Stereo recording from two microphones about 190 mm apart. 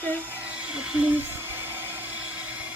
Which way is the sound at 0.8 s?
5° right (ahead or behind).